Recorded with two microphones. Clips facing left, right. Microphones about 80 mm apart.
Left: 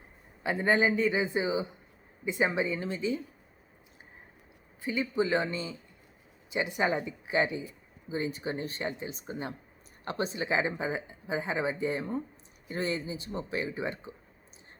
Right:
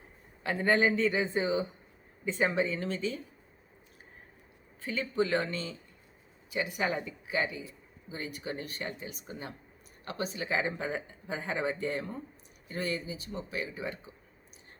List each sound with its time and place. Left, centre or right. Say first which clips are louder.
0.4 s a man's voice: left 1 dB; centre
4.8 s a man's voice: left 1 dB; centre
12.7 s speech: left 2 dB; left